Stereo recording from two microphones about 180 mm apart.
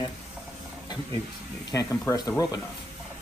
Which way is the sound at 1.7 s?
20° left (ahead or behind).